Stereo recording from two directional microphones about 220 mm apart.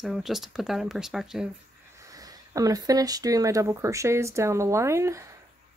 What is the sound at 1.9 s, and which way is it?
Speech, 15° right (ahead or behind).